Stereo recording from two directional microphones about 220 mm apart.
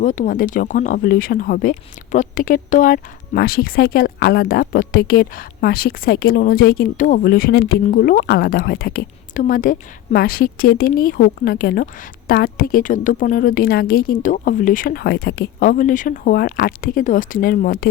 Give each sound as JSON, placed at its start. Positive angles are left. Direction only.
{"t": 0.0, "sound": "speech", "side_deg": 35}